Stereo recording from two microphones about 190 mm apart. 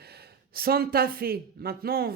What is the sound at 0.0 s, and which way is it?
A woman's voice, 55° right (ahead or behind).